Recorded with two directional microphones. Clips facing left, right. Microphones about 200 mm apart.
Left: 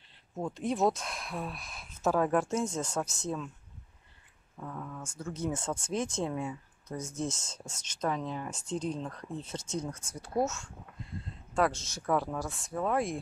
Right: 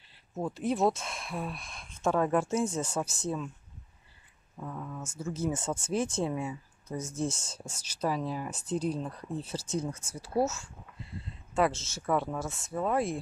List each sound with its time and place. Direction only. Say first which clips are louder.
0.3 s speech: right 2 dB; 5° right (ahead or behind)
4.6 s speech: right 2 dB; 5° right (ahead or behind)
7.7 s speech: right 1 dB; 35° right (ahead or behind)
8.0 s speech: right 2 dB; 5° right (ahead or behind)